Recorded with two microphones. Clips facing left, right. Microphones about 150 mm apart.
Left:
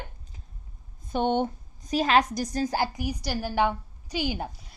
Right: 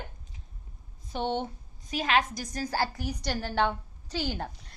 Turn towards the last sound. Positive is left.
turn(degrees=10)  # may be behind; listen again after turning